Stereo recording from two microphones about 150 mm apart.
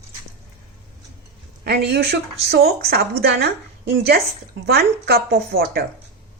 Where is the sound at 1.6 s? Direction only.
90° right.